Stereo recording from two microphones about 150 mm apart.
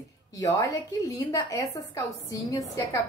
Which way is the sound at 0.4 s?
20° left (ahead or behind).